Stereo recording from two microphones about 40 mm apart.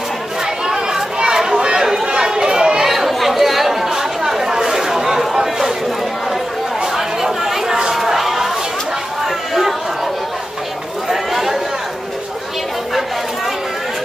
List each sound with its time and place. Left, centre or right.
0.7 s chatter: centre
2.9 s chatter: centre
7.0 s a sound: centre
9.2 s chatter: centre
11.1 s chatter: centre